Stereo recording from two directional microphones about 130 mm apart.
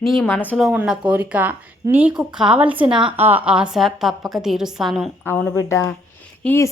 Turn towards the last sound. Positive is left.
turn(degrees=15)  # may be behind; listen again after turning